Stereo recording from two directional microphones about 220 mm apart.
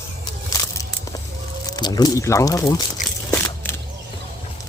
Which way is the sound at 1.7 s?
15° left (ahead or behind).